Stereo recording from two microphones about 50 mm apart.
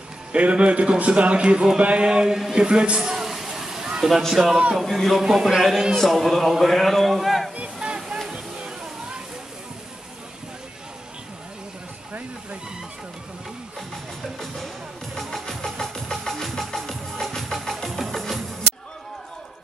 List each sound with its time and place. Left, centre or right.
0.3 s a man's voice: right
3.0 s a sound: centre
4.3 s a man's voice: centre
5.2 s a man's voice: centre
7.5 s a sound: right
15.1 s music: centre